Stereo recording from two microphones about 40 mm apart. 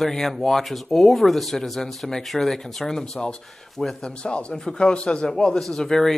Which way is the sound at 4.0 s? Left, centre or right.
Left.